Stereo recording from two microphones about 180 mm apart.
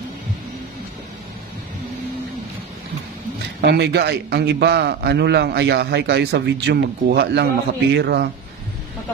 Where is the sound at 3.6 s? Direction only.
70° right (ahead or behind).